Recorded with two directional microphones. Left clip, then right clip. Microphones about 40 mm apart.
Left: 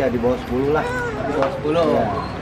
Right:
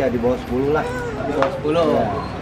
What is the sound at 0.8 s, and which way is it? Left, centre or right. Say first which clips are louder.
Speech: left 1 dB; left.